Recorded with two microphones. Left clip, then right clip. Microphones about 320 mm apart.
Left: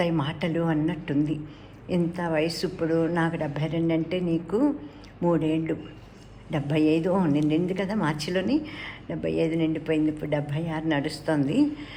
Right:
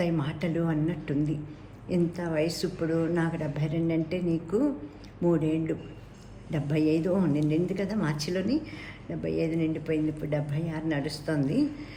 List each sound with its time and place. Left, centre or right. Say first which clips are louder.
0.0 s a woman's voice: left 4 dB; centre